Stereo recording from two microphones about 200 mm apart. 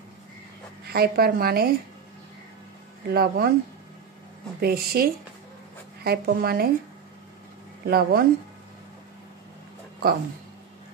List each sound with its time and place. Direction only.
0.8 s a woman's voice: 50° right (ahead or behind)
3.1 s a woman's voice: 50° right (ahead or behind)
4.6 s a woman's voice: 50° right (ahead or behind)
7.8 s a woman's voice: 50° right (ahead or behind)